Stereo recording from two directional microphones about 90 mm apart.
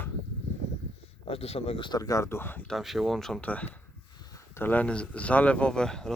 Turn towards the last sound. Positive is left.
turn(degrees=5)  # may be behind; listen again after turning